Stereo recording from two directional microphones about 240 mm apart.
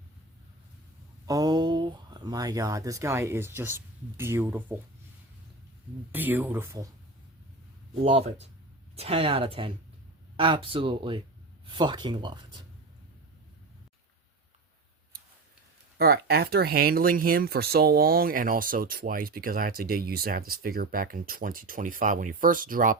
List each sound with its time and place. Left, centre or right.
1.3 s speech: centre
6.1 s speech: centre
8.0 s speech: right
16.0 s speech: right